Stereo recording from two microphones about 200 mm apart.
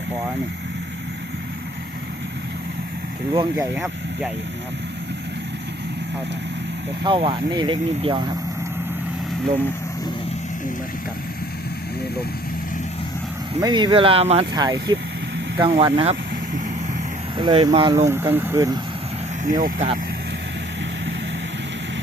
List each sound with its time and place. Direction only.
3.8 s speech: centre (ahead or behind)
7.0 s speech: 25° right (ahead or behind)
13.6 s speech: 20° right (ahead or behind)
17.3 s speech: 25° right (ahead or behind)
19.5 s speech: 40° right (ahead or behind)